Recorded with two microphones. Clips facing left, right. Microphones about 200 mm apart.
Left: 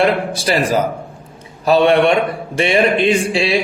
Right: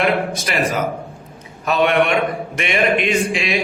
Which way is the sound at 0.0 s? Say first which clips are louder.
Left 3 dB; 30° left (ahead or behind).